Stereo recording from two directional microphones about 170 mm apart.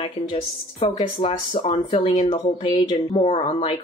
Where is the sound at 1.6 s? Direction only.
30° left (ahead or behind).